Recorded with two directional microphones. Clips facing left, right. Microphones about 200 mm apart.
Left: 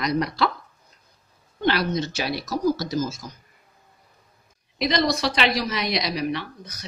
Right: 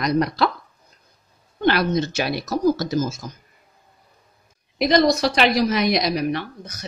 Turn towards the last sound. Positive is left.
turn(degrees=-50)  # may be behind; listen again after turning